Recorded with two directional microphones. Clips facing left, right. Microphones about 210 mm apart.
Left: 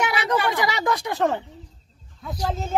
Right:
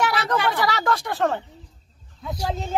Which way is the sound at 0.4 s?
15° left (ahead or behind).